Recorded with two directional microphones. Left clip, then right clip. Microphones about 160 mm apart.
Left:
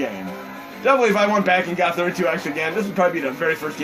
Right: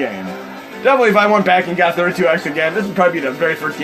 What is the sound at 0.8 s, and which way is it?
A man's voice, 40° right (ahead or behind).